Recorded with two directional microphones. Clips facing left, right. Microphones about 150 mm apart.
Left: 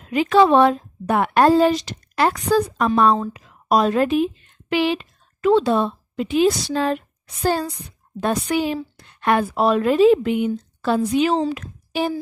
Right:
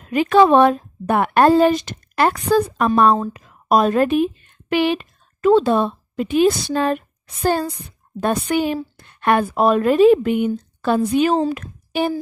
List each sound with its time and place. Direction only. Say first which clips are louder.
0.0 s a woman's voice: right 2 dB; 50° right (ahead or behind)